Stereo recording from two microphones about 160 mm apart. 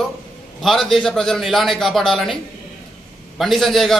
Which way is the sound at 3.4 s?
Centre (ahead or behind).